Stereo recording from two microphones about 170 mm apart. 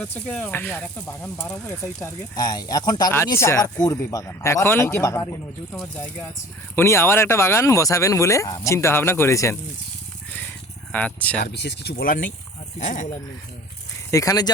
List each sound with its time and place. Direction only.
0.0 s speech: 10° left (ahead or behind)
6.7 s speech: 15° left (ahead or behind)
10.9 s speech: 10° left (ahead or behind)
11.5 s speech: 80° left; by 13.1 s 50° left (ahead or behind)
14.1 s speech: 20° left (ahead or behind)